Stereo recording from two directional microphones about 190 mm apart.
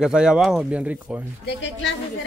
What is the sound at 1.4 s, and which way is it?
Speech, 70° left (ahead or behind).